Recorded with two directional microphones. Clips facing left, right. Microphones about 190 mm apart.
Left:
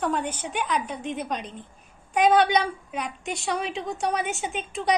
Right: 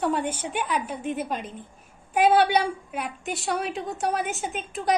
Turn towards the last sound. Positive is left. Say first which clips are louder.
# even
turn(degrees=0)  # may be behind; listen again after turning